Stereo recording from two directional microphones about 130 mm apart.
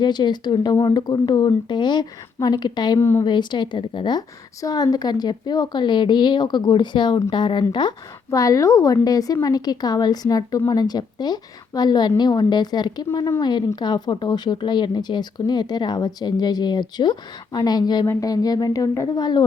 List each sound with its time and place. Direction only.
0.0 s speech: 35° left (ahead or behind)
3.0 s a woman's voice: 20° left (ahead or behind)
3.2 s a woman's voice: 35° left (ahead or behind)
13.1 s a woman's voice: 20° left (ahead or behind)
13.4 s a woman's voice: 35° left (ahead or behind)